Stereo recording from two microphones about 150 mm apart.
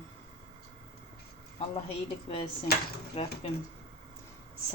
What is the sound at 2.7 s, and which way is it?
Speech, 90° left.